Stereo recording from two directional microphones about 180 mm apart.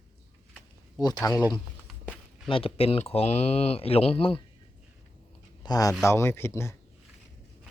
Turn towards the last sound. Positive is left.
turn(degrees=15)  # may be behind; listen again after turning